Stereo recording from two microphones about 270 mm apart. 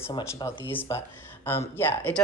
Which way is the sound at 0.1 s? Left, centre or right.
Centre.